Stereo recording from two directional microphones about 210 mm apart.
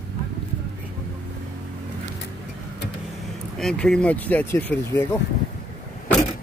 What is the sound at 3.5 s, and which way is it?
Speech, 5° left (ahead or behind).